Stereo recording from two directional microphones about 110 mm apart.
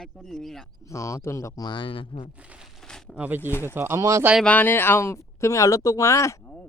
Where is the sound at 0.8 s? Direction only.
30° left (ahead or behind).